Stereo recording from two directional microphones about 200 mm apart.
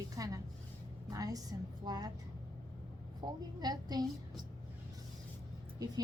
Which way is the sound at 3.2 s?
20° right (ahead or behind).